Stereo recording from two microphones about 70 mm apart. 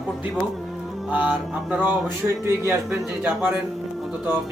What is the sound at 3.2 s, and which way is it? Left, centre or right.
Speech, right.